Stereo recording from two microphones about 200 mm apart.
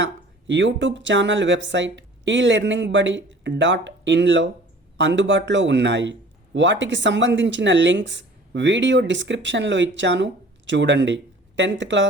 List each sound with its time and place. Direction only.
0.0 s a man's voice: 65° right (ahead or behind)